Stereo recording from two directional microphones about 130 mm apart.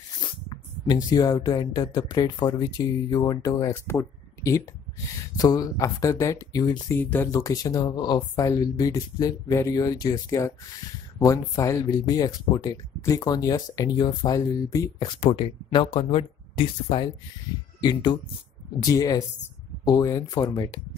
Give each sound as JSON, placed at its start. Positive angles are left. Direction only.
{"t": 1.1, "sound": "speech", "side_deg": 30}
{"t": 7.0, "sound": "speech", "side_deg": 15}
{"t": 7.2, "sound": "speech", "side_deg": 25}
{"t": 15.1, "sound": "speech", "side_deg": 45}